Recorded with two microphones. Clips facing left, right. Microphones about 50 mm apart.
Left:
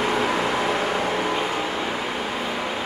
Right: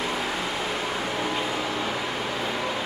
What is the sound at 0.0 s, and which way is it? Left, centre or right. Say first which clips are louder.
Vehicle: left 6 dB; left.